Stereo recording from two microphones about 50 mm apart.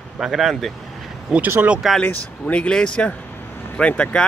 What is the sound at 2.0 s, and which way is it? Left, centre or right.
Speech, left.